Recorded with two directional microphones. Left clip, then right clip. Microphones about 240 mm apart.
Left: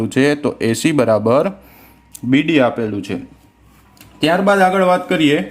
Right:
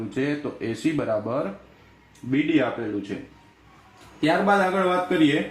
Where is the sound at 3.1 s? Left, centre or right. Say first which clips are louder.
Left 8 dB; left.